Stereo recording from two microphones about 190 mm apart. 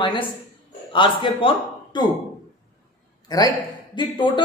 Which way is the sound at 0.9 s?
25° left (ahead or behind).